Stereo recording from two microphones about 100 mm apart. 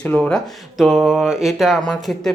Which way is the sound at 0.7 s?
Centre (ahead or behind).